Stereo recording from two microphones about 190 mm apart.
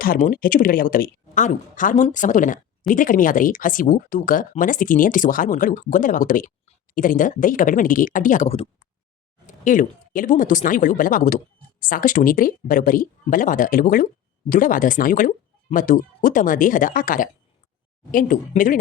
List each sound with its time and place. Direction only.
0.0 s speech: 45° left (ahead or behind); by 8.9 s 30° left (ahead or behind)
9.5 s speech: 45° left (ahead or behind)